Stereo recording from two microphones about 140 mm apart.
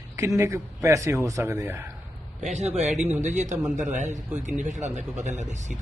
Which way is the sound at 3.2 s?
55° right (ahead or behind).